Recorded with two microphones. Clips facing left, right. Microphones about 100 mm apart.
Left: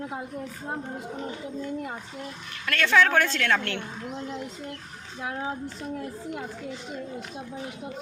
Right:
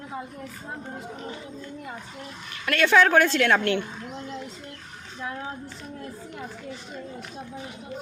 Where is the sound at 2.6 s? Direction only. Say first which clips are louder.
Right 2 dB; 10° right (ahead or behind).